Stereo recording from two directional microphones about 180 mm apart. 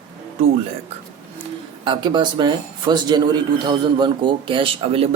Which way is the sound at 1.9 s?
25° right (ahead or behind).